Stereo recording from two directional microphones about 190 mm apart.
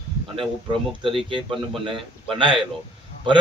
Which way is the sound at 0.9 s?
25° right (ahead or behind).